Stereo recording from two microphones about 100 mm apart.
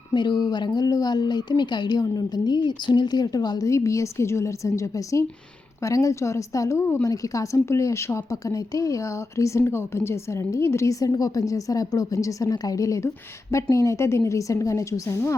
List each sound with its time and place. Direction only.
0.1 s a woman's voice: 50° left (ahead or behind); by 15.4 s 30° left (ahead or behind)